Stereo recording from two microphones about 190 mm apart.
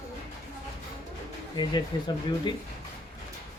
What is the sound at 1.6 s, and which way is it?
Speech, 25° left (ahead or behind).